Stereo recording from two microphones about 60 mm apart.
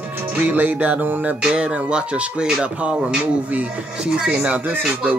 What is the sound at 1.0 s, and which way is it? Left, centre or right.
Music, right.